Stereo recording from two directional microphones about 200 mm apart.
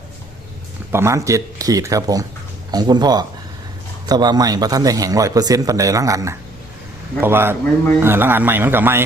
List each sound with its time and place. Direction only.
0.9 s a man's voice: 15° right (ahead or behind)